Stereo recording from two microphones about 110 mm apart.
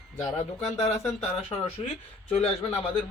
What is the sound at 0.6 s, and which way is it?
Speech, 70° left (ahead or behind).